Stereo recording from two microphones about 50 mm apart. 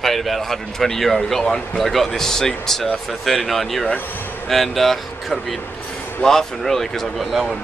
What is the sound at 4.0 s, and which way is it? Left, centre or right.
Speech, left.